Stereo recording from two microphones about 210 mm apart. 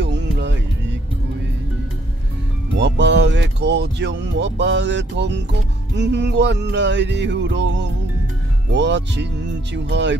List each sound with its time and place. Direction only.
0.0 s music: 55° right (ahead or behind)
2.8 s speech: 55° right (ahead or behind)